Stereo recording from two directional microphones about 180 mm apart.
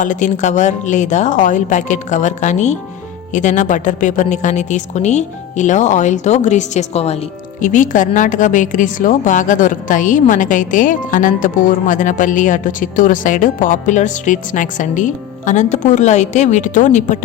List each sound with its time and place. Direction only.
0.0 s a woman's voice: 45° left (ahead or behind)